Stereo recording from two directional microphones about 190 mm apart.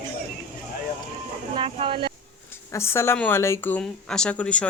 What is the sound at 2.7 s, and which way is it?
Speech, 15° left (ahead or behind).